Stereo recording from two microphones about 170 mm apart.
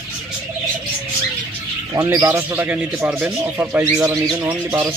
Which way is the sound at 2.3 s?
10° right (ahead or behind).